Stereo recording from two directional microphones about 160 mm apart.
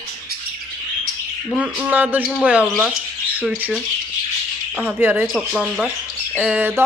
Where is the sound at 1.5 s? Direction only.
10° right (ahead or behind).